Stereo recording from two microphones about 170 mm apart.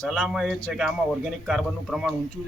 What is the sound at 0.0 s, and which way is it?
A man's voice, centre (ahead or behind).